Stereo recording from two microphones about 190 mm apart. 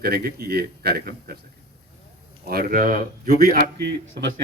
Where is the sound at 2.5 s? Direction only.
55° right (ahead or behind).